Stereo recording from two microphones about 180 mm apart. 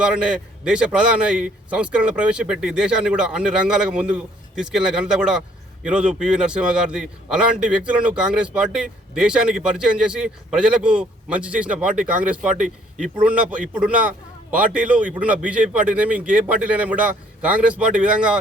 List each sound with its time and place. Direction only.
0.0 s a man's voice: 5° right (ahead or behind)
12.5 s speech: 45° right (ahead or behind)
13.2 s speech: 5° right (ahead or behind)